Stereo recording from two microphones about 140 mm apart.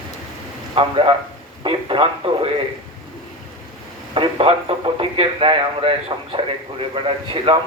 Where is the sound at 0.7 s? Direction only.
40° right (ahead or behind).